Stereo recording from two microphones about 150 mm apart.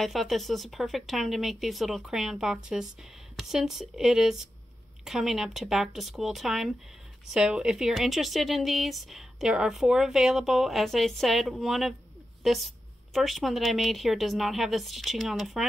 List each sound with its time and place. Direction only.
0.0 s speech: centre (ahead or behind)